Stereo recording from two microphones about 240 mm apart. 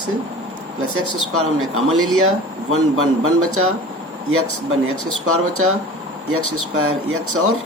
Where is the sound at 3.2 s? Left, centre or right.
Right.